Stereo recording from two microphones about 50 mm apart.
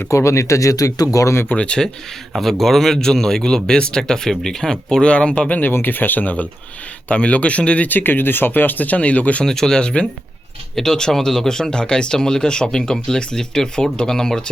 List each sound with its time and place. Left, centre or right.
0.1 s speech: left
1.5 s speech: left
2.4 s speech: centre; by 5.5 s left
5.5 s speech: left
5.7 s speech: left
7.9 s speech: left
9.4 s speech: centre